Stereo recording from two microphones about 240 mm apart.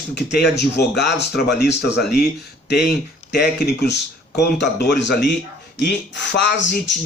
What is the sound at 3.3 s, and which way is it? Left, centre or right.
Speech, left.